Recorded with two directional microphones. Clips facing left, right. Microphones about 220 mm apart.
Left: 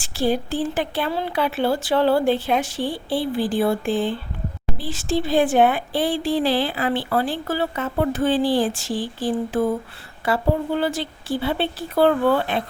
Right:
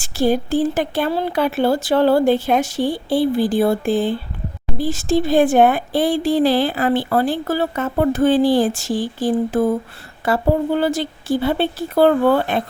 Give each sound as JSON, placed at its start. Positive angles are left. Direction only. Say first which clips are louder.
{"t": 0.0, "sound": "speech", "louder": "right 4 dB", "side_deg": -45}